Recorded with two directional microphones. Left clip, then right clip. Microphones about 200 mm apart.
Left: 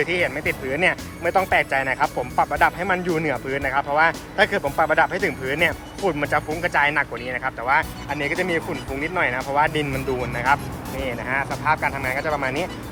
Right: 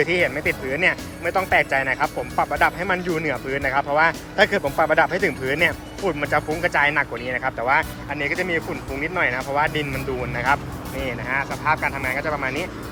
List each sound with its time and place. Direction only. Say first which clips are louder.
0.0 s speech: right 2 dB; 10° right (ahead or behind)